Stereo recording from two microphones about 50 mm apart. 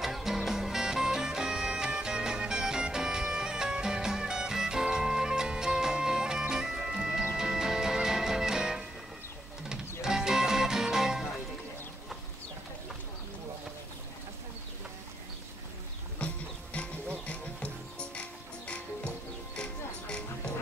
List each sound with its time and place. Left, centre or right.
0.0 s music: centre
10.0 s music: centre
16.2 s music: left